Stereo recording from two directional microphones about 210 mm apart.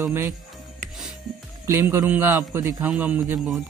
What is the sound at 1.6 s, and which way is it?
A man's voice, 10° right (ahead or behind).